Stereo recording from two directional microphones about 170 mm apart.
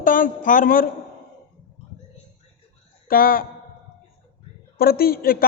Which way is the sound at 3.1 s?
55° left (ahead or behind).